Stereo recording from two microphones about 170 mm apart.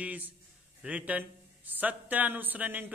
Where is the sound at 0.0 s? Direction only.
10° right (ahead or behind).